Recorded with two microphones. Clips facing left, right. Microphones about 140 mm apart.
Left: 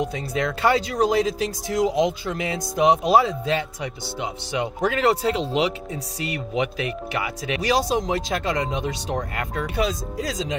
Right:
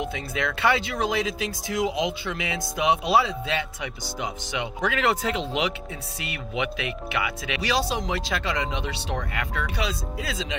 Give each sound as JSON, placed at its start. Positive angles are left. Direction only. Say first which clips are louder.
{"t": 0.0, "sound": "speech", "louder": "left 4 dB", "side_deg": 35}